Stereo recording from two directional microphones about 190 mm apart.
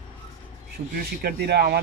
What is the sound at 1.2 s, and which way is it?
Speech, 55° right (ahead or behind).